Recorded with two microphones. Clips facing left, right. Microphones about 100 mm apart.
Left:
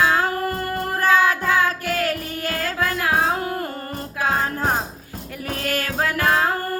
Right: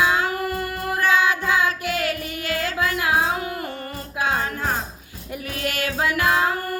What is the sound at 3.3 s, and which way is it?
Music, 35° left (ahead or behind).